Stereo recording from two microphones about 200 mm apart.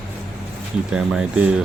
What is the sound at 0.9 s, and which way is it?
Speech, 5° right (ahead or behind).